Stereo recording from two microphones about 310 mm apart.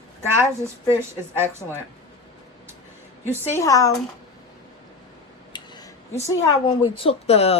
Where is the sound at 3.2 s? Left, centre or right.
Centre.